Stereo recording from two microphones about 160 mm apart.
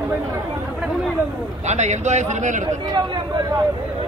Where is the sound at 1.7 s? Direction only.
45° right (ahead or behind).